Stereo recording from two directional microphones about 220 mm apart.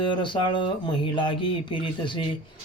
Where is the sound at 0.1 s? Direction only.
20° left (ahead or behind).